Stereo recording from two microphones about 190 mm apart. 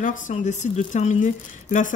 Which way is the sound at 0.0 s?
40° left (ahead or behind).